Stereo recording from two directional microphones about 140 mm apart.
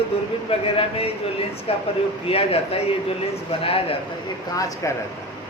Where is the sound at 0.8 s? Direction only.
45° left (ahead or behind).